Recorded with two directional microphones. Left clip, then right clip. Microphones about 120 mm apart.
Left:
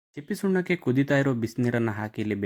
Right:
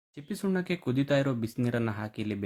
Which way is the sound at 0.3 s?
25° left (ahead or behind).